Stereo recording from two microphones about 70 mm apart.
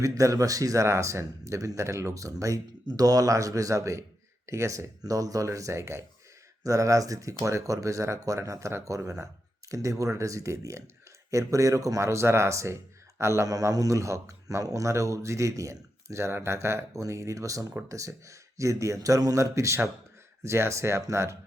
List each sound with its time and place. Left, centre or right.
0.0 s speech: right
0.9 s speech: right
2.8 s speech: right
6.6 s speech: right
13.5 s speech: right